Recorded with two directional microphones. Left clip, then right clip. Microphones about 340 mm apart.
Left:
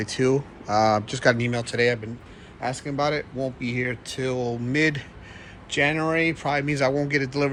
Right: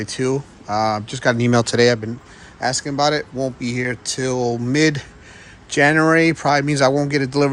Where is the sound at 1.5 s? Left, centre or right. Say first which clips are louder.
Right 8 dB; centre.